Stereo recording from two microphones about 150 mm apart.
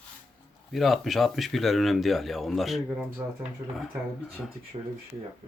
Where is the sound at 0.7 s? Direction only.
Centre (ahead or behind).